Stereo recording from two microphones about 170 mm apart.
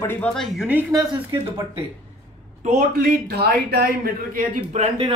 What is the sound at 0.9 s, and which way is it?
Speech, 25° right (ahead or behind).